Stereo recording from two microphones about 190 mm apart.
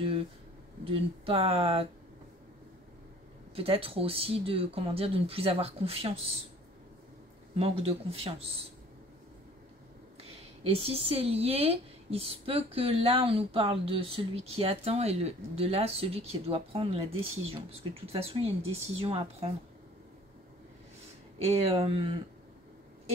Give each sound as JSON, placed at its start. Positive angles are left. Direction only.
{"t": 0.8, "sound": "speech", "side_deg": -30}
{"t": 3.5, "sound": "speech", "side_deg": -30}
{"t": 7.5, "sound": "speech", "side_deg": -30}
{"t": 10.6, "sound": "speech", "side_deg": -30}
{"t": 21.6, "sound": "speech", "side_deg": -30}